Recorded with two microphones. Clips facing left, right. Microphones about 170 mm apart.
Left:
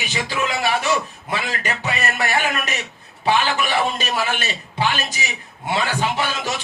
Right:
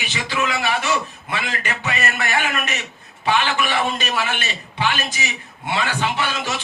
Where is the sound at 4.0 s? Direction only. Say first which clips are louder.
Left 1 dB; 40° left (ahead or behind).